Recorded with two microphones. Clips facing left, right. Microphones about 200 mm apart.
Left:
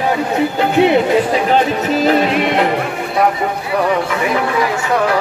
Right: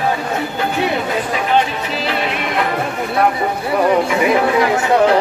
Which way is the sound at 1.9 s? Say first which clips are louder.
Left 8 dB; 45° left (ahead or behind).